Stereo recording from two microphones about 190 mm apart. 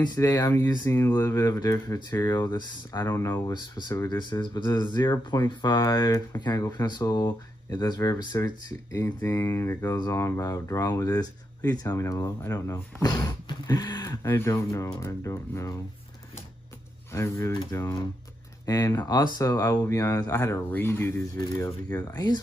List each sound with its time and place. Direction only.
0.0 s speech: 20° left (ahead or behind)
4.2 s speech: 25° left (ahead or behind)
17.1 s speech: 15° left (ahead or behind)